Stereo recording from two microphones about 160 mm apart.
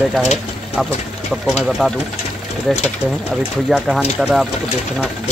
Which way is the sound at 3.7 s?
5° right (ahead or behind).